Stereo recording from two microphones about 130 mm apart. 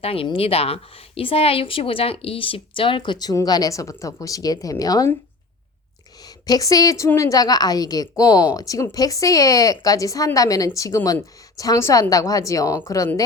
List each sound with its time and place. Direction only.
0.0 s a woman's voice: 45° left (ahead or behind); by 5.1 s 30° left (ahead or behind)
6.2 s a woman's voice: 30° left (ahead or behind)